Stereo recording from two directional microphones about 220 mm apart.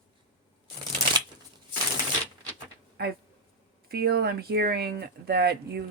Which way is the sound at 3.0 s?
45° right (ahead or behind).